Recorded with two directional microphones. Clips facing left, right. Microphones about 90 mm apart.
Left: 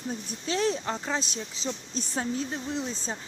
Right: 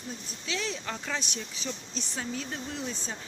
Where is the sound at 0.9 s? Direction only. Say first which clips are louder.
Left 4 dB; 30° left (ahead or behind).